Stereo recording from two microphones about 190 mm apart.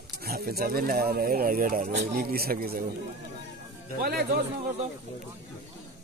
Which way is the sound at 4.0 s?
55° right (ahead or behind).